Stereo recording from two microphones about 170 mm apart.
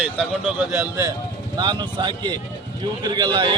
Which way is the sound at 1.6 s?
25° right (ahead or behind).